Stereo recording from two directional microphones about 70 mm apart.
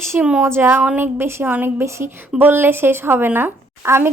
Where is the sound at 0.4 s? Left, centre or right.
Right.